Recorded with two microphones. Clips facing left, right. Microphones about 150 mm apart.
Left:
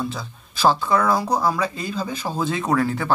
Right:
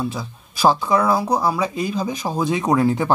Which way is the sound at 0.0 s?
10° right (ahead or behind).